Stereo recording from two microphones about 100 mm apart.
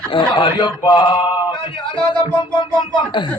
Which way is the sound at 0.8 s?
50° left (ahead or behind).